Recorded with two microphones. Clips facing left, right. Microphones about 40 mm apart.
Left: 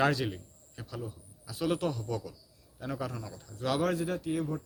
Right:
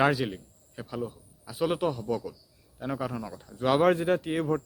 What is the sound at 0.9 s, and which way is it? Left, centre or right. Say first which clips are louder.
Speech: right 6 dB; right.